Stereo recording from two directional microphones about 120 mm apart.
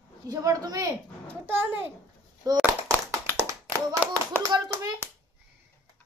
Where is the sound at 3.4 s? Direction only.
25° right (ahead or behind).